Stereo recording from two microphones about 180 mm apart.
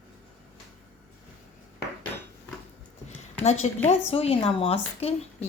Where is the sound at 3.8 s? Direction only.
35° left (ahead or behind).